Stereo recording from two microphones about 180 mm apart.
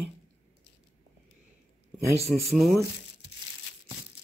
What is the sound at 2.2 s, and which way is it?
Speech, centre (ahead or behind).